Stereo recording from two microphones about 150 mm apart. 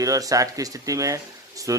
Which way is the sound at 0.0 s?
25° right (ahead or behind).